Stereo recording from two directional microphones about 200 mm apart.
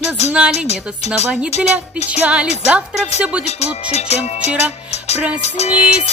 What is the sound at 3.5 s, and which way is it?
Music, 30° left (ahead or behind).